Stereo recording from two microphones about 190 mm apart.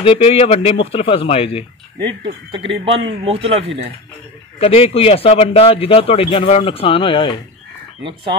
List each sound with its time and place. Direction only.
0.0 s a man's voice: 30° left (ahead or behind)
2.0 s speech: 25° right (ahead or behind)
4.6 s a man's voice: 30° left (ahead or behind)